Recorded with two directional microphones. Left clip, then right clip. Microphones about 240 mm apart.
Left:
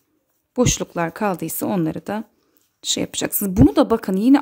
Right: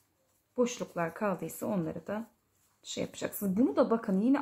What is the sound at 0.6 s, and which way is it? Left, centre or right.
A woman's voice, left.